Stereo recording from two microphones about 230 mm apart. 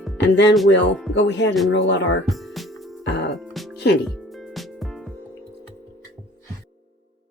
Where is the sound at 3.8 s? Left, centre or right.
Left.